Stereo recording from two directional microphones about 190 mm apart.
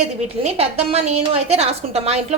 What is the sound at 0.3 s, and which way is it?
A woman's voice, 35° right (ahead or behind).